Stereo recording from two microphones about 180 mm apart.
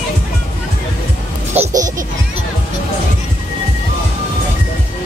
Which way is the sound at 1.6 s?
10° right (ahead or behind).